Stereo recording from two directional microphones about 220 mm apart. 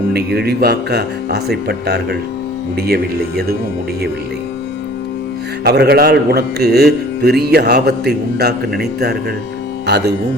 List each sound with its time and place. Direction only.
0.1 s speech: 45° right (ahead or behind)
5.6 s speech: 45° right (ahead or behind)